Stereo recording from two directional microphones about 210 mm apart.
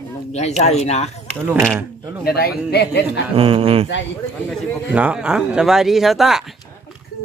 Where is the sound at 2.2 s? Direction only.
45° left (ahead or behind).